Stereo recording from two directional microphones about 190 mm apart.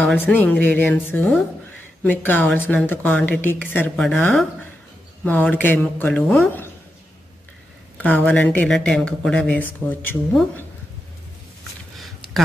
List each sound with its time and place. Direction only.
0.0 s speech: 10° left (ahead or behind)
8.0 s speech: 10° left (ahead or behind)